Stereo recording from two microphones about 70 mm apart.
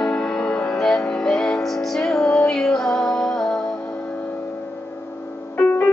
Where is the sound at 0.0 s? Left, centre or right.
Centre.